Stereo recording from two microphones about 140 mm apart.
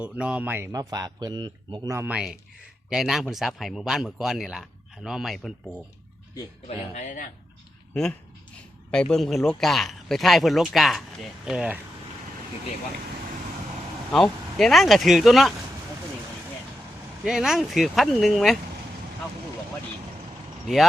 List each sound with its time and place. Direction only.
0.0 s speech: 10° right (ahead or behind); by 1.9 s 30° right (ahead or behind)
1.9 s speech: 15° right (ahead or behind)
6.7 s speech: 55° left (ahead or behind)
8.9 s speech: 5° left (ahead or behind)
14.1 s speech: 5° left (ahead or behind)
17.2 s speech: 5° right (ahead or behind)